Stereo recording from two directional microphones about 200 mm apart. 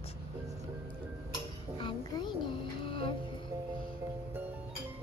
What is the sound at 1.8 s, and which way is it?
Music, 25° left (ahead or behind).